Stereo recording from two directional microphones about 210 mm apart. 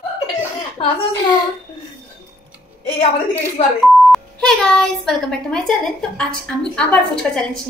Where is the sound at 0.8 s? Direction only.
25° left (ahead or behind).